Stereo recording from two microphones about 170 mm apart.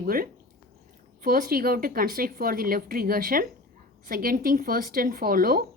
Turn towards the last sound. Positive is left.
turn(degrees=-60)  # may be behind; listen again after turning